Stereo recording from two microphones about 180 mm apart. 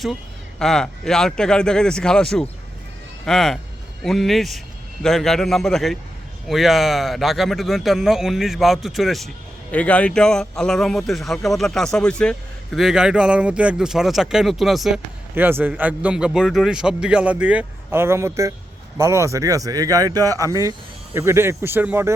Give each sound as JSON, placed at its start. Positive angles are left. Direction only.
{"t": 0.6, "sound": "speech", "side_deg": 5}